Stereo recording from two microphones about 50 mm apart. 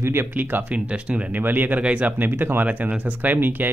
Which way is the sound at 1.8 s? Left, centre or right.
Right.